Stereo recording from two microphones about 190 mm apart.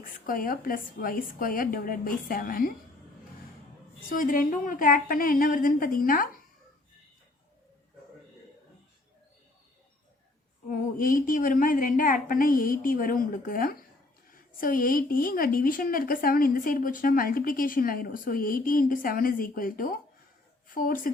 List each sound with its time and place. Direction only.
0.0 s a woman's voice: 50° left (ahead or behind)
4.1 s a woman's voice: 45° left (ahead or behind)
10.7 s a woman's voice: 45° left (ahead or behind)